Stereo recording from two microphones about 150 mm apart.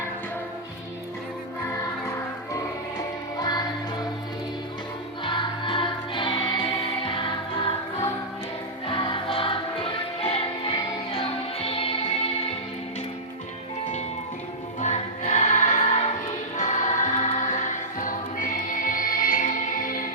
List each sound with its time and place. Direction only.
3.3 s music: 25° left (ahead or behind)
5.2 s music: 30° left (ahead or behind)
8.9 s music: 35° left (ahead or behind)
14.8 s music: 50° left (ahead or behind); by 20.1 s 65° left (ahead or behind)